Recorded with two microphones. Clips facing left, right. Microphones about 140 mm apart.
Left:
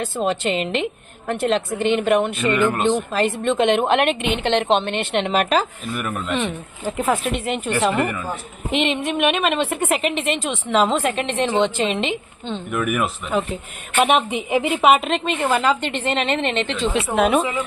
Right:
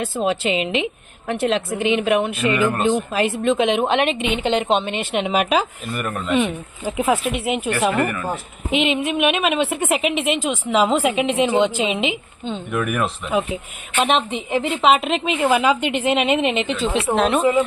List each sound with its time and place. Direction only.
0.0 s speech: centre (ahead or behind)
7.9 s speech: 15° left (ahead or behind)
8.7 s speech: centre (ahead or behind)